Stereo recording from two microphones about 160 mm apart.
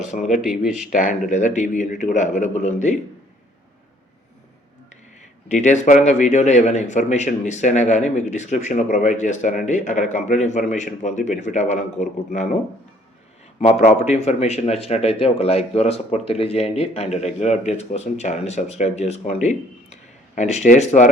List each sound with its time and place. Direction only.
0.1 s a man's voice: 50° left (ahead or behind)
0.4 s speech: 5° right (ahead or behind)
0.8 s a man's voice: 55° left (ahead or behind)
5.5 s a man's voice: 50° left (ahead or behind)
13.6 s a man's voice: 40° left (ahead or behind)